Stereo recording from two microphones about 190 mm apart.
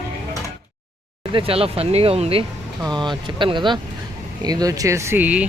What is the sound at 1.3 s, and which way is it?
Speech, 30° right (ahead or behind).